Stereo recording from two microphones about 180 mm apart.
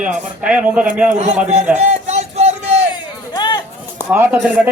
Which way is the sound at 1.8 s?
40° right (ahead or behind).